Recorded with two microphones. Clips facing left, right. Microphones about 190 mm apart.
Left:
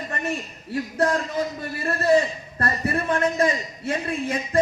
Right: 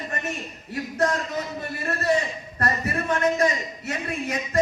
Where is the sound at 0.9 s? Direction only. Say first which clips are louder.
Left 2 dB; 30° left (ahead or behind).